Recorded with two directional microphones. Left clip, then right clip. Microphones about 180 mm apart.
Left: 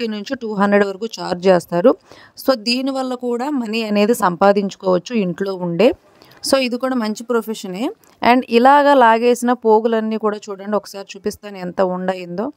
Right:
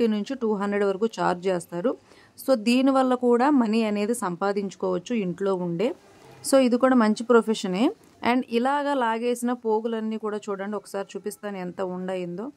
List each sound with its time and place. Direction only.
0.0 s speech: 40° left (ahead or behind)
6.7 s speech: centre (ahead or behind)
7.8 s speech: 45° left (ahead or behind)